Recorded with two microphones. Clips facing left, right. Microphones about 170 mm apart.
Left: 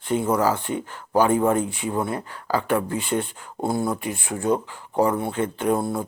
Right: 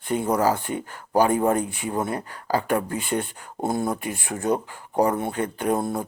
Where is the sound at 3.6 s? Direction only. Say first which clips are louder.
Left 1 dB; 20° right (ahead or behind).